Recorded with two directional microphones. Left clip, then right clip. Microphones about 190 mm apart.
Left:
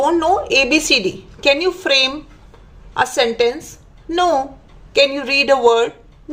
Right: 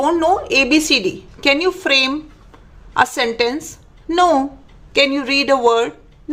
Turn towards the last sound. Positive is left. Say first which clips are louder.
# left 1 dB
turn(degrees=-10)  # may be behind; listen again after turning